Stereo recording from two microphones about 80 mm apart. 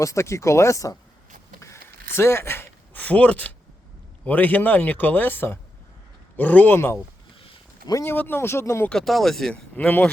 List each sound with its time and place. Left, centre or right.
0.0 s speech: left
1.6 s a sound: left; by 3.5 s centre
4.3 s speech: left
8.0 s speech: left
8.9 s speech: centre
9.7 s speech: left